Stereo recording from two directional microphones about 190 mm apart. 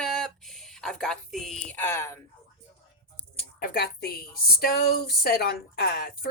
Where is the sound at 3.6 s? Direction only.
55° left (ahead or behind).